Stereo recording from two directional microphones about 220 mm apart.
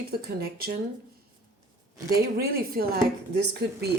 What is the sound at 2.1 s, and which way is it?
Speech, 45° right (ahead or behind).